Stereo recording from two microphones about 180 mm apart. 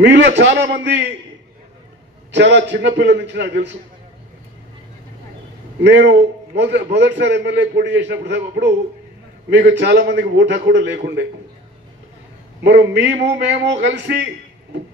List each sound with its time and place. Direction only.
0.0 s a man's voice: 70° right (ahead or behind)
2.3 s a man's voice: 80° right
5.8 s a man's voice: 75° right (ahead or behind)
12.6 s a man's voice: 75° right (ahead or behind)